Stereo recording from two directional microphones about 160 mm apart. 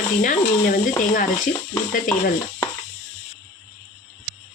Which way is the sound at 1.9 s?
55° left (ahead or behind).